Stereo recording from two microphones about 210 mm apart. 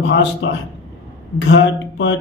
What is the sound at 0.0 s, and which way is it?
A man's voice, 60° left (ahead or behind).